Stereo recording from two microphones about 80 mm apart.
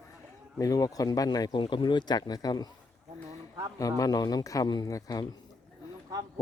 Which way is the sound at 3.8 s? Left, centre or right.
Left.